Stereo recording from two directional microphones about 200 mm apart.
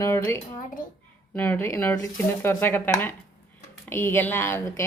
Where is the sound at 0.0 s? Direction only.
15° left (ahead or behind).